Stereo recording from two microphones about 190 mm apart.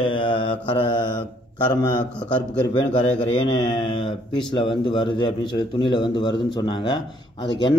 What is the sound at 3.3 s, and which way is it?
Speech, 25° left (ahead or behind).